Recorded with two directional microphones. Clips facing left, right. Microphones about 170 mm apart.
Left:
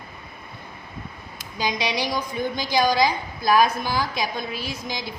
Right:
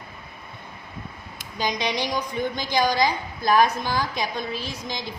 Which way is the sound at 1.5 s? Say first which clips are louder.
Even; 5° left (ahead or behind).